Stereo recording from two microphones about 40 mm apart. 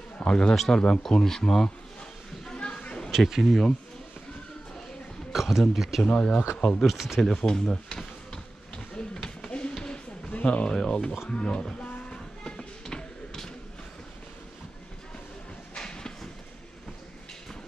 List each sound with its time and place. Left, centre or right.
0.2 s a man's voice: left
2.4 s a sound: left
3.1 s speech: centre
5.3 s speech: centre
6.0 s speech: left
6.8 s speech: centre
7.3 s a sound: centre
10.7 s speech: centre
12.1 s music: centre
15.7 s a sound: centre